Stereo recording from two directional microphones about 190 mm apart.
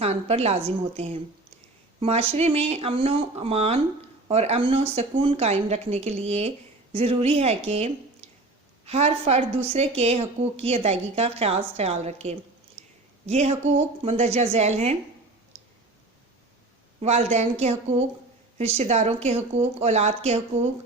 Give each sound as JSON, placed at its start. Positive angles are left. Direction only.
{"t": 0.0, "sound": "a woman's voice", "side_deg": -35}
{"t": 12.8, "sound": "a sound", "side_deg": -35}
{"t": 13.2, "sound": "a woman's voice", "side_deg": -35}
{"t": 17.0, "sound": "a woman's voice", "side_deg": -35}